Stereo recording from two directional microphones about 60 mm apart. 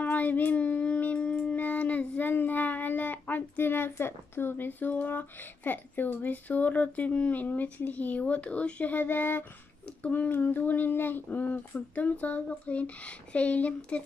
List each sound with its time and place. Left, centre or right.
0.0 s child singing: left
10.0 s speech: left